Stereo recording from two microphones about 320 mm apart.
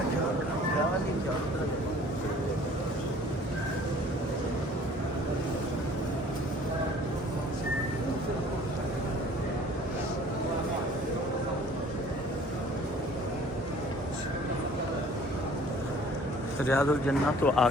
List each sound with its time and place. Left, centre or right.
16.6 s speech: centre